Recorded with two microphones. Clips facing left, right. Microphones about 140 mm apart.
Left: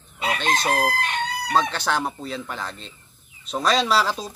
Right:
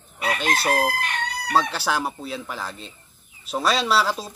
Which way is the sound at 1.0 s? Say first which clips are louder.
Left 2 dB; 25° left (ahead or behind).